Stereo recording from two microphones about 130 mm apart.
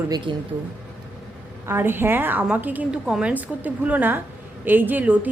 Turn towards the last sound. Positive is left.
turn(degrees=-10)  # may be behind; listen again after turning